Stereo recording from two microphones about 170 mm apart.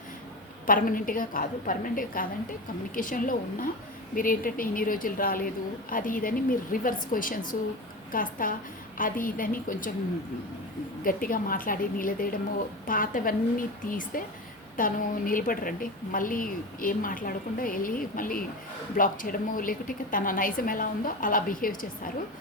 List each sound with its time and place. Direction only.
0.7 s a woman's voice: 55° left (ahead or behind)
11.0 s a woman's voice: 55° left (ahead or behind)